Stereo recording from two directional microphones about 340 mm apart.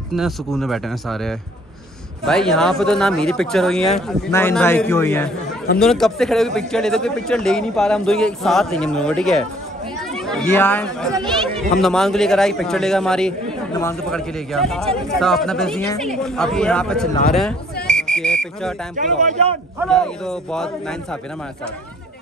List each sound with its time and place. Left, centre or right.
0.1 s a man's voice: centre
18.1 s whistle: centre
18.9 s speech: right
19.8 s a man's voice: centre